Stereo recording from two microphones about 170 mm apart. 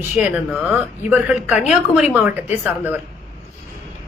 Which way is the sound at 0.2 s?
10° right (ahead or behind).